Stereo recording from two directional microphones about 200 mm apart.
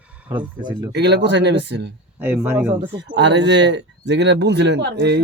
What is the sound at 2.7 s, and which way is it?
Speech, 60° right (ahead or behind).